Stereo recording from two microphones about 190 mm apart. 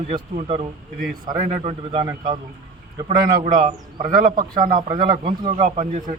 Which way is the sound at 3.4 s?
45° right (ahead or behind).